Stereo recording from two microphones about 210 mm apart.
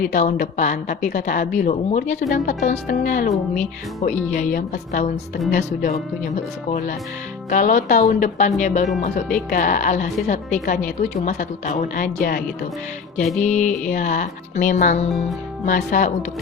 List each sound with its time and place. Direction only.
0.0 s speech: 40° left (ahead or behind)
13.4 s speech: 35° left (ahead or behind)